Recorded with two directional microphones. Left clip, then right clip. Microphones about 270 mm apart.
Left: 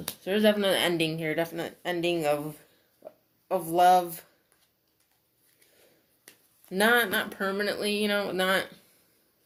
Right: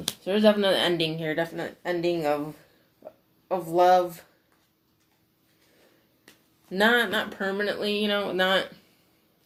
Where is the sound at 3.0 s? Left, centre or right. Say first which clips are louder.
Right 2 dB; left.